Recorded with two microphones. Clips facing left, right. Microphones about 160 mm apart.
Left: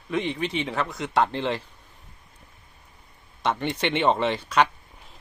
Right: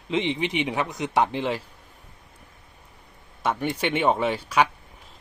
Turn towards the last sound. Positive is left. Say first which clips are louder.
# even
turn(degrees=-10)  # may be behind; listen again after turning